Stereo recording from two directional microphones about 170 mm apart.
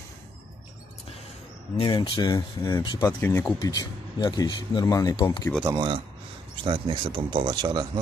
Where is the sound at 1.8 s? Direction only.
30° left (ahead or behind).